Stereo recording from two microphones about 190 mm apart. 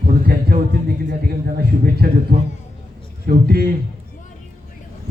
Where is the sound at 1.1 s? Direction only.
55° right (ahead or behind).